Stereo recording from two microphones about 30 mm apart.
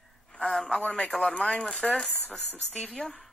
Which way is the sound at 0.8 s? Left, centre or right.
Left.